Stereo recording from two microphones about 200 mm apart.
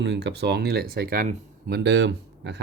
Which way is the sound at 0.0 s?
60° right (ahead or behind).